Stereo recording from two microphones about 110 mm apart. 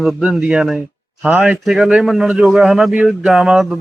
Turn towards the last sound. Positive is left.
turn(degrees=-5)  # may be behind; listen again after turning